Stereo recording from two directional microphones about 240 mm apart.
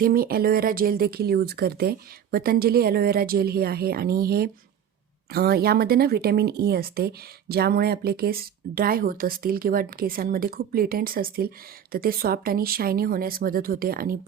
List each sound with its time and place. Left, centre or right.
0.0 s speech: right